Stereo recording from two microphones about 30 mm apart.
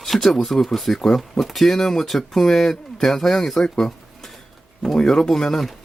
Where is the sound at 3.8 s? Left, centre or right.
Centre.